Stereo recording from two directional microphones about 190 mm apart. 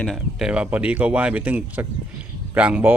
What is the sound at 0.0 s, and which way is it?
A man's voice, centre (ahead or behind).